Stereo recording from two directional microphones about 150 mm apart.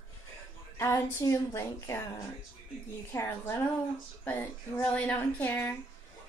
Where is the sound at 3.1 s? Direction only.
15° left (ahead or behind).